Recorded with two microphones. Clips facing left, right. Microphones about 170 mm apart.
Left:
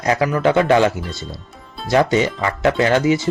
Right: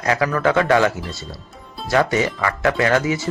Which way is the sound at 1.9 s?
20° left (ahead or behind).